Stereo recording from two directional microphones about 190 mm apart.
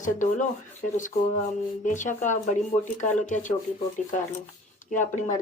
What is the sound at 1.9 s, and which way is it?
Speech, 40° left (ahead or behind).